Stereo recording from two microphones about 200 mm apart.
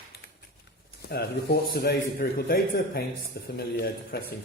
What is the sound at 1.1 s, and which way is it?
A man's voice, 50° left (ahead or behind).